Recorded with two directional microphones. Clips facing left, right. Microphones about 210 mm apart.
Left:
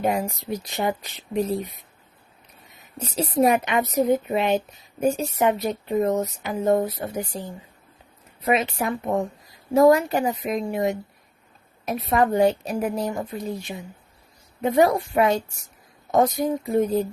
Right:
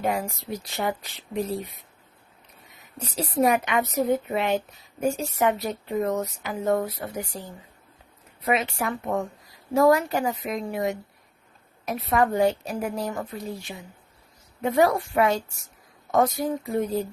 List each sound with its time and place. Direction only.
0.0 s a woman's voice: 20° left (ahead or behind)
3.2 s a woman's voice: 25° left (ahead or behind)
8.4 s a woman's voice: 20° left (ahead or behind)